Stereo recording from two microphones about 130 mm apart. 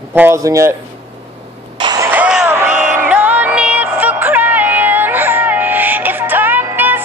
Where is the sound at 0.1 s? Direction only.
20° right (ahead or behind).